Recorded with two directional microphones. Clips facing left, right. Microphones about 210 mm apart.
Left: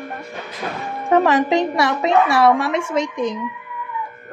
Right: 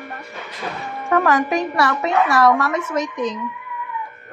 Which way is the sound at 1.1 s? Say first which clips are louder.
Left 3 dB; 25° left (ahead or behind).